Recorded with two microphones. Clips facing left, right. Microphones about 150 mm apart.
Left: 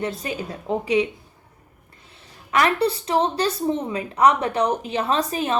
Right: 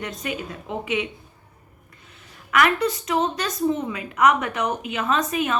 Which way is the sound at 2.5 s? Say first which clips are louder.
Left 1 dB; 30° left (ahead or behind).